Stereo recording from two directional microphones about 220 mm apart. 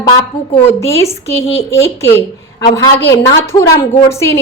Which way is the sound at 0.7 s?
15° left (ahead or behind).